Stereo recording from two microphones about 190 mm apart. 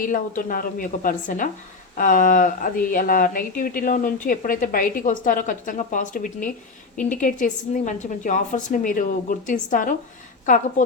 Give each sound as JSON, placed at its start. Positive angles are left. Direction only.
{"t": 0.0, "sound": "speech", "side_deg": 45}